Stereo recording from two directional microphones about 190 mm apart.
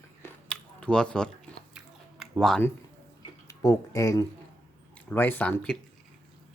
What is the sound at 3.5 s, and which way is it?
Speech, 15° left (ahead or behind).